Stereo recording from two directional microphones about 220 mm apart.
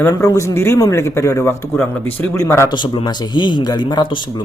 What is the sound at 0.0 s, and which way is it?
A man's voice, 15° left (ahead or behind).